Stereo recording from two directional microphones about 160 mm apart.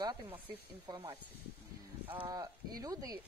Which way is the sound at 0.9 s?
25° right (ahead or behind).